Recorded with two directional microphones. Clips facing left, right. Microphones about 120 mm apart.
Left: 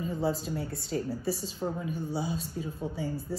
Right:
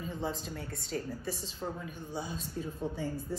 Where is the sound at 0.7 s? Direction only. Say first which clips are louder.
Left 5 dB; 30° left (ahead or behind).